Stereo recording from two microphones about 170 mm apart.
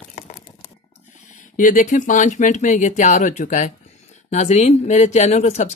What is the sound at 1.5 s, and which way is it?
Speech, 50° left (ahead or behind).